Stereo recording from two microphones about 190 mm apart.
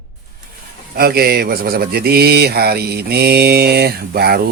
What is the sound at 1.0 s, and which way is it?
Speech, 55° right (ahead or behind).